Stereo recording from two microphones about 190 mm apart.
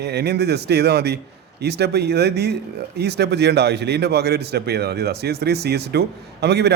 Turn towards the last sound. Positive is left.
turn(degrees=-60)  # may be behind; listen again after turning